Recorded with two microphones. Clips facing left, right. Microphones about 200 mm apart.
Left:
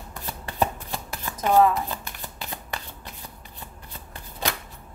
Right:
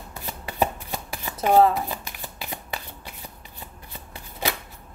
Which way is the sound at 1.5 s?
35° right (ahead or behind).